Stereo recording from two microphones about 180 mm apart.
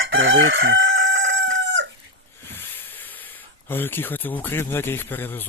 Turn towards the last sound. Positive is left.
turn(degrees=10)  # may be behind; listen again after turning